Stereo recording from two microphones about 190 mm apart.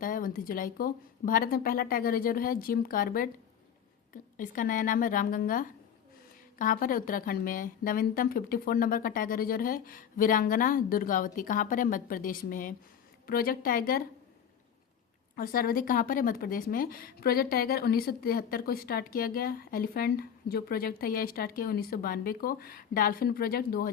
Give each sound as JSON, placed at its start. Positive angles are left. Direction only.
{"t": 0.0, "sound": "a woman's voice", "side_deg": 45}
{"t": 15.4, "sound": "a woman's voice", "side_deg": 50}